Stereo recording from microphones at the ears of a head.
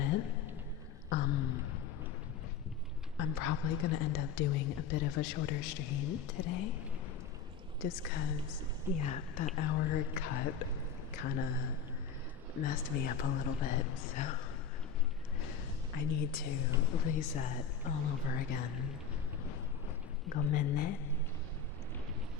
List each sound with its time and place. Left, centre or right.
0.0 s a sound: left
1.1 s a woman's voice: left
3.2 s a woman's voice: left
7.8 s a woman's voice: left
15.4 s a woman's voice: left
20.2 s a woman's voice: left